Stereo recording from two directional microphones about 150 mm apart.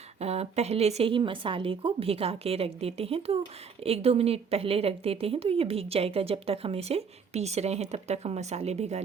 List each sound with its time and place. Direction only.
0.2 s speech: 45° right (ahead or behind)